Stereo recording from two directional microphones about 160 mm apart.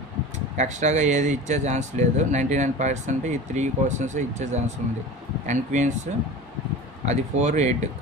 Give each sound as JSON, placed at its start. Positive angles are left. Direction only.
{"t": 0.5, "sound": "speech", "side_deg": -45}
{"t": 7.0, "sound": "speech", "side_deg": -45}